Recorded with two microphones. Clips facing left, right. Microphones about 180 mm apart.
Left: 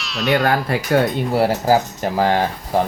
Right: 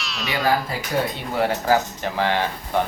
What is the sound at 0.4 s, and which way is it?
Speech, 60° left (ahead or behind).